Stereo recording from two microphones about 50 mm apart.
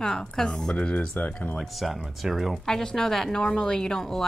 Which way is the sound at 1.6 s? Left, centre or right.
Centre.